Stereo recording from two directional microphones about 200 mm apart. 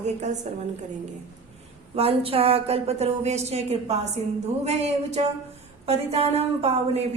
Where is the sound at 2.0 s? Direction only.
30° right (ahead or behind).